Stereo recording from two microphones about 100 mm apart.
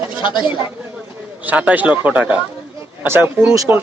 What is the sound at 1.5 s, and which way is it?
A man's voice, 15° right (ahead or behind).